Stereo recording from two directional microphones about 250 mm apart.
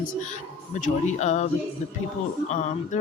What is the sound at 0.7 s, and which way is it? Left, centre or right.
Speech, left.